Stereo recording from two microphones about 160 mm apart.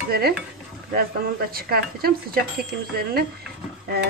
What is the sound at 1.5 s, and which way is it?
Speech, 70° right (ahead or behind).